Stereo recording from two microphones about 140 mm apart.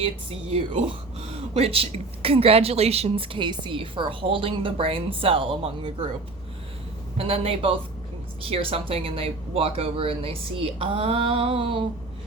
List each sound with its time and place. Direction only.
0.0 s speech: 40° right (ahead or behind)
7.2 s speech: 45° right (ahead or behind)